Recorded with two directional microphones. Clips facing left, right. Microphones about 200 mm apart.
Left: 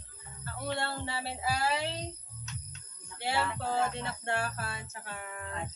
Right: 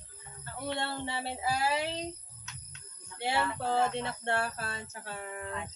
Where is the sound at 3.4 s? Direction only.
5° left (ahead or behind).